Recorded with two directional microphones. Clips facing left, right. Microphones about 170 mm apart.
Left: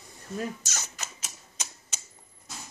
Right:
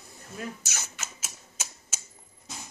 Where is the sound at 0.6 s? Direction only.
10° right (ahead or behind).